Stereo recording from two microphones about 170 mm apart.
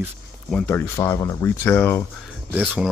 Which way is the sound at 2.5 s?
10° right (ahead or behind).